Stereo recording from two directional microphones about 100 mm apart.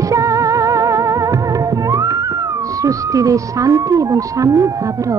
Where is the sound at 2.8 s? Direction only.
35° right (ahead or behind).